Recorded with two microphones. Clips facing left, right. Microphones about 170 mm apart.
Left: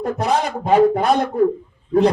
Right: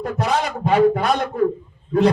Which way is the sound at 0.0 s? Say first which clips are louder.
Left 2 dB; 30° left (ahead or behind).